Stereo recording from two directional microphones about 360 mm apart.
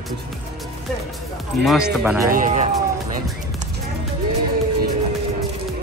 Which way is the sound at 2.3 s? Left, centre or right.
Right.